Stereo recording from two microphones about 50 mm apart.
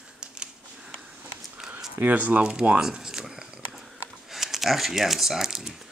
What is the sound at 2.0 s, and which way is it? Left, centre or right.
Speech, right.